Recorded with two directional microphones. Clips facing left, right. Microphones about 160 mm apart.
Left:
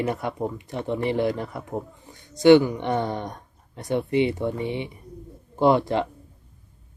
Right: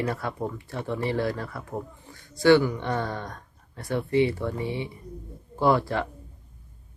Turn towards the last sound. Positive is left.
turn(degrees=20)  # may be behind; listen again after turning